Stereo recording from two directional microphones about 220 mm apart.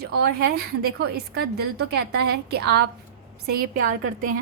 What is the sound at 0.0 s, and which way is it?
A woman's voice, 45° right (ahead or behind).